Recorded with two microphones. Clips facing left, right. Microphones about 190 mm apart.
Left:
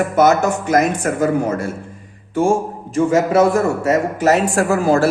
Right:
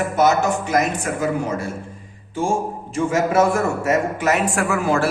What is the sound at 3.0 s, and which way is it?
A man's voice, 35° left (ahead or behind).